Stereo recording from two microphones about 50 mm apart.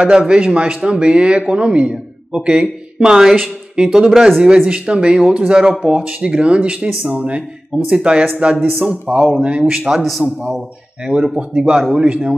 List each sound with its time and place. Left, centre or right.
0.0 s a man's voice: centre
4.6 s speech: centre
9.8 s a man's voice: centre
11.3 s a man's voice: centre